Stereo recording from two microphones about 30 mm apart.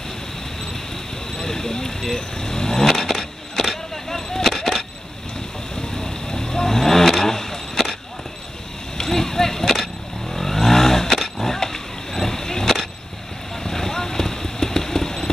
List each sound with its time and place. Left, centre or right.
1.3 s vehicle: centre
5.8 s vehicle: left
8.9 s vehicle: centre